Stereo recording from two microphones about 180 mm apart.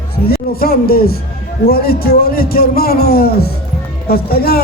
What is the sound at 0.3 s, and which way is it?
Speech, 55° left (ahead or behind).